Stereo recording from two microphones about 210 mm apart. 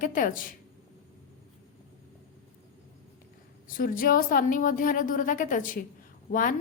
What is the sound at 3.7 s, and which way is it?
A woman's voice, 40° left (ahead or behind).